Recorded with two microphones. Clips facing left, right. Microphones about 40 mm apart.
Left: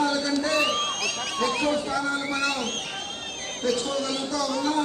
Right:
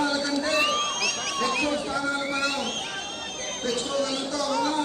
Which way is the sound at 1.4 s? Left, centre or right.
Right.